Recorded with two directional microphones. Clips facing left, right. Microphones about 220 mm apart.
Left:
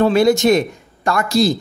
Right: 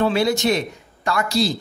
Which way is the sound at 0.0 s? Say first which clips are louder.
Left 6 dB; 45° left (ahead or behind).